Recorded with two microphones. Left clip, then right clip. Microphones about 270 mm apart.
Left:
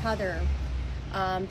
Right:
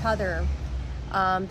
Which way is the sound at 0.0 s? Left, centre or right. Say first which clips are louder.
Right 4 dB; centre.